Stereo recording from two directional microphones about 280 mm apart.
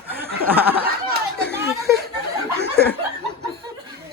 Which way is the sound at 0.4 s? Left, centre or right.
Centre.